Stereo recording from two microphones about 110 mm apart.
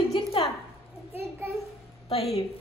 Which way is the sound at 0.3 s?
55° left (ahead or behind).